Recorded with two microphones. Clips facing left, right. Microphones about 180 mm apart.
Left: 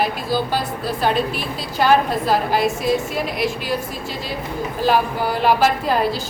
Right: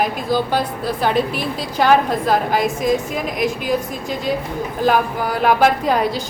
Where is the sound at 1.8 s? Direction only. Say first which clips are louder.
Right 1 dB; 5° left (ahead or behind).